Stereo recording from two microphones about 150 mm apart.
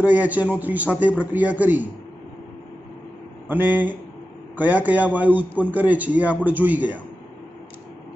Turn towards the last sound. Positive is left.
turn(degrees=-10)  # may be behind; listen again after turning